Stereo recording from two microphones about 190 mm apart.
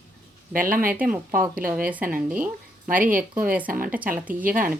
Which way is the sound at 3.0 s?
45° right (ahead or behind).